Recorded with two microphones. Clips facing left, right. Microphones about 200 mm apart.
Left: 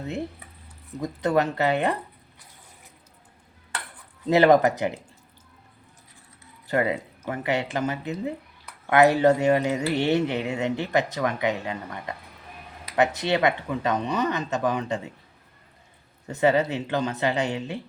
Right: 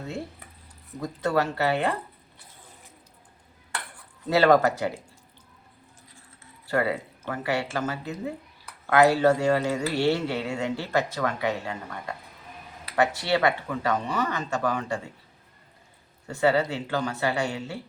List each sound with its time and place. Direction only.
0.9 s speech: 20° left (ahead or behind)
4.3 s speech: 20° left (ahead or behind)
6.7 s speech: 20° left (ahead or behind)
16.2 s speech: 20° left (ahead or behind)